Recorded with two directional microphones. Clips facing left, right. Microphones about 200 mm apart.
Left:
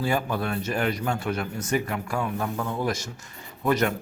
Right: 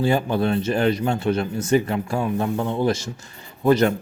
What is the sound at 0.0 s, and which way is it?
Speech, 25° right (ahead or behind).